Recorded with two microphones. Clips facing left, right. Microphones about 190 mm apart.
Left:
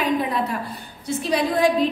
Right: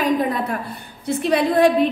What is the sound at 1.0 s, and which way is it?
Speech, 55° right (ahead or behind).